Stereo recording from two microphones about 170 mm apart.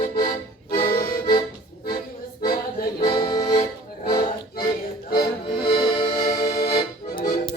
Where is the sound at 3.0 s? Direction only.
25° left (ahead or behind).